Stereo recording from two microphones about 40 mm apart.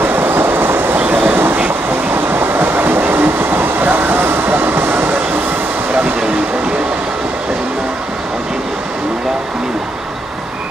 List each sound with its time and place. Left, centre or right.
0.0 s train: right
4.5 s train: right